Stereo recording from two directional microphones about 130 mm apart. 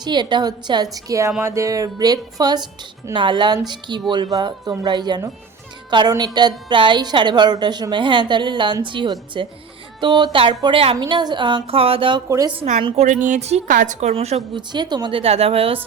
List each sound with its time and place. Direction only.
0.0 s a woman's voice: 35° right (ahead or behind)
1.4 s music: 20° right (ahead or behind)
3.2 s a woman's voice: 35° right (ahead or behind)
10.9 s a woman's voice: 30° right (ahead or behind)
13.0 s speech: 75° right (ahead or behind)
13.7 s a woman's voice: 80° right; by 14.3 s 55° right (ahead or behind)
14.5 s a woman's voice: 35° right (ahead or behind)
15.2 s a woman's voice: 50° right (ahead or behind)